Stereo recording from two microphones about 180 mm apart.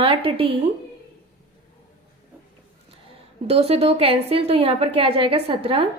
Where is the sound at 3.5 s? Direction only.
35° right (ahead or behind).